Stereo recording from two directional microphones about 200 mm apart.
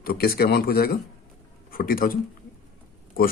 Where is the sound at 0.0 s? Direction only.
50° left (ahead or behind).